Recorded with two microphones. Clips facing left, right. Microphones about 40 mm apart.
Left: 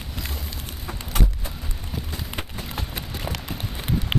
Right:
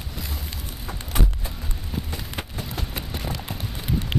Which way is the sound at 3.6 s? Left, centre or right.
Left.